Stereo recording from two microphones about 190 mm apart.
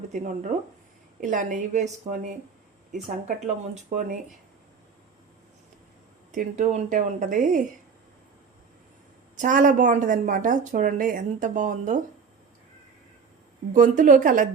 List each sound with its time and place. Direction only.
1.2 s speech: 40° right (ahead or behind)
6.3 s speech: 40° right (ahead or behind)
9.4 s speech: 45° right (ahead or behind)
13.7 s speech: 40° right (ahead or behind)